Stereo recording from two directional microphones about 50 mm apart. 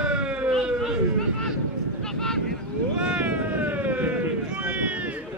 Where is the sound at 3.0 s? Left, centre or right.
Centre; by 4.3 s right.